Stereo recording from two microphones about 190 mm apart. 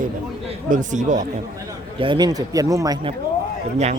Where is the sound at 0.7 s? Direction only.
40° right (ahead or behind).